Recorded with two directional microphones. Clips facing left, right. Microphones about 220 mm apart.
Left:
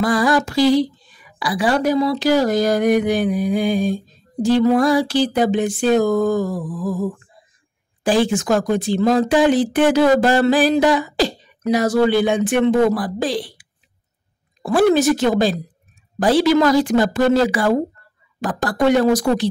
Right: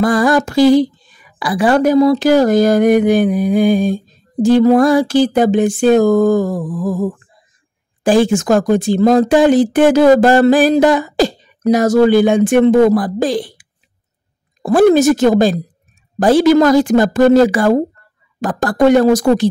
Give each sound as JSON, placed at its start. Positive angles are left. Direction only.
{"t": 0.0, "sound": "speech", "side_deg": -50}